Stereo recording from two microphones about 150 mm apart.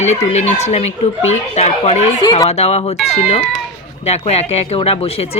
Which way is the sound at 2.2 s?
25° left (ahead or behind).